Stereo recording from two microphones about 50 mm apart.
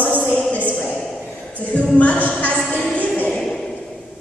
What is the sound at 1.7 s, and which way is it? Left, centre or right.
Speech, left.